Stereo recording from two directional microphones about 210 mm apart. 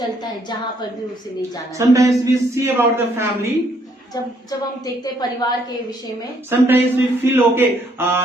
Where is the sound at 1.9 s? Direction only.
15° right (ahead or behind).